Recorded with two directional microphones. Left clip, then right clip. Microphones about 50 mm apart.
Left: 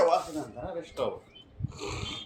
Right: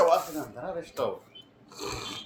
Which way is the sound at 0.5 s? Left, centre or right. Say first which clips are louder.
Right 2 dB; right.